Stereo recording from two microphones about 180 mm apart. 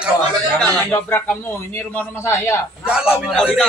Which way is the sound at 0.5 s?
10° left (ahead or behind).